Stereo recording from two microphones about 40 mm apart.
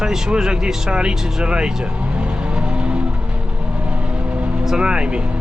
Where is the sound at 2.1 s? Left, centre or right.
Right.